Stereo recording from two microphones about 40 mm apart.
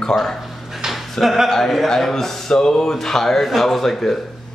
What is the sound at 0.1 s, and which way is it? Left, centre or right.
Speech, centre.